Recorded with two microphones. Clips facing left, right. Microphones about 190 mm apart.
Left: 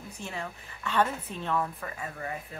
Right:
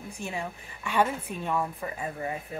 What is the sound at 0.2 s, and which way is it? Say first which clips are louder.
A woman's voice: right 3 dB; 10° right (ahead or behind).